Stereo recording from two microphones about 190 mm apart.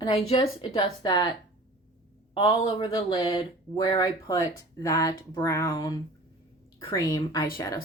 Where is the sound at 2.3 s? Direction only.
25° left (ahead or behind).